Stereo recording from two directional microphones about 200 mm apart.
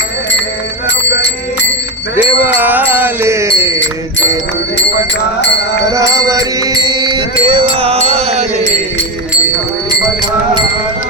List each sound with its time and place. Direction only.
2.1 s music: 10° right (ahead or behind)
5.9 s mantra: 15° right (ahead or behind); by 8.4 s 30° right (ahead or behind)